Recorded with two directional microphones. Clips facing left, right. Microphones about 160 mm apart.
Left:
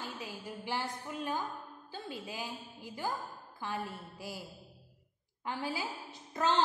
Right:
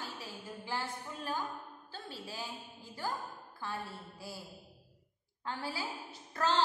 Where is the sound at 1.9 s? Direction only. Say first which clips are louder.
Left 4 dB; 15° left (ahead or behind).